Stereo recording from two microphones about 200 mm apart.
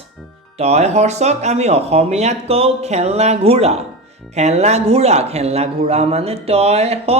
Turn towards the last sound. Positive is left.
turn(degrees=-30)  # may be behind; listen again after turning